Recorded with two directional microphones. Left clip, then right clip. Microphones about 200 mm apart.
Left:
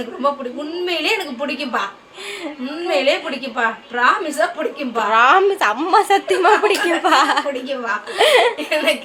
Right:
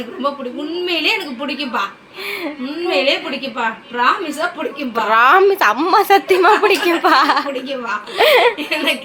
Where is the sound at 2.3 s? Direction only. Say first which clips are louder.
Right 4 dB; 10° right (ahead or behind).